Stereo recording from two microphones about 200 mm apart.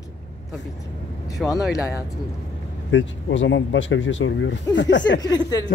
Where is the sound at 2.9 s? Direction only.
65° left (ahead or behind).